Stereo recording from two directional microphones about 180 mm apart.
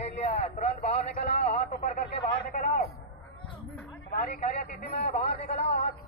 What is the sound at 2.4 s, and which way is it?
Speech, 50° left (ahead or behind).